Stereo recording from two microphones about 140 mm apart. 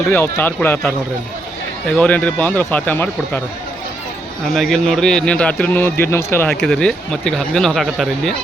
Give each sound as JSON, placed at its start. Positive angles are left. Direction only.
{"t": 0.1, "sound": "a man's voice", "side_deg": 10}
{"t": 2.0, "sound": "a man's voice", "side_deg": 10}
{"t": 4.5, "sound": "a man's voice", "side_deg": 5}
{"t": 6.5, "sound": "speech", "side_deg": 5}